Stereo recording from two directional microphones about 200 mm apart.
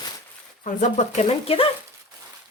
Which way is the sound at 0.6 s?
40° left (ahead or behind).